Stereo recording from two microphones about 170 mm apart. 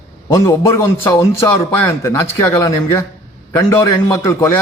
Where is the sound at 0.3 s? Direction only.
20° left (ahead or behind).